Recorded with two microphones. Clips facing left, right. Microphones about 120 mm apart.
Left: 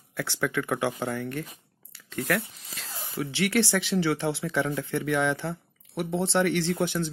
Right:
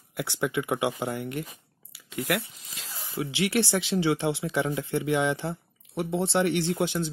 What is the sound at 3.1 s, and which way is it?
Speech, 20° right (ahead or behind).